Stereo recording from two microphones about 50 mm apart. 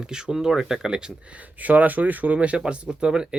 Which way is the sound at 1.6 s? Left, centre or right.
Right.